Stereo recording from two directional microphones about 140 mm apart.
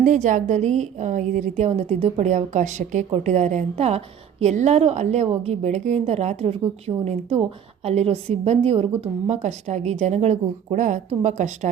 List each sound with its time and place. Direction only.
0.0 s a woman's voice: 60° right (ahead or behind)